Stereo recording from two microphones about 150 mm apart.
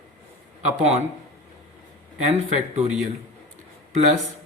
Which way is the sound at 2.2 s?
50° right (ahead or behind).